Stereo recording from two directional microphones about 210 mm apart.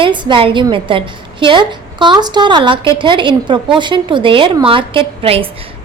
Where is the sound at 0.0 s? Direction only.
25° right (ahead or behind).